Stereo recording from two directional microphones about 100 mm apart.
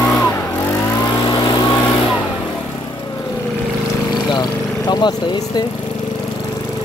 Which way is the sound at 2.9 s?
30° left (ahead or behind).